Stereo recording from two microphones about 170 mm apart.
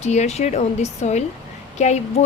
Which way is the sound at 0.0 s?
40° left (ahead or behind).